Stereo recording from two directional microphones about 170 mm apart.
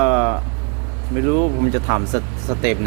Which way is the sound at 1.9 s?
15° right (ahead or behind).